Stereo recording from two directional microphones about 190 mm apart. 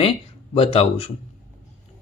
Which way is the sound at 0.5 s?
30° left (ahead or behind).